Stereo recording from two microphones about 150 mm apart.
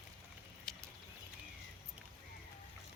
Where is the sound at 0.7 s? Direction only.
5° left (ahead or behind).